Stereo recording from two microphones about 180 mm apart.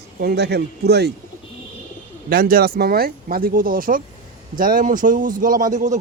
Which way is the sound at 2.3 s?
55° right (ahead or behind).